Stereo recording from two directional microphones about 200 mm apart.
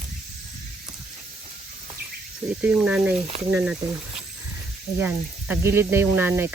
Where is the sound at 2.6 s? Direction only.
5° right (ahead or behind).